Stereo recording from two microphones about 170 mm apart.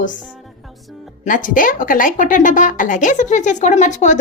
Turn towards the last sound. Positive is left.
turn(degrees=45)  # may be behind; listen again after turning